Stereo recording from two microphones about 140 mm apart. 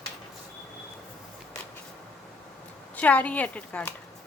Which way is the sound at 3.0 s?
10° left (ahead or behind).